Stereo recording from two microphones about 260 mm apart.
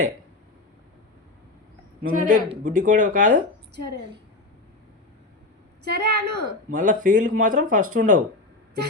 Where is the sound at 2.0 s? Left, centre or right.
Right.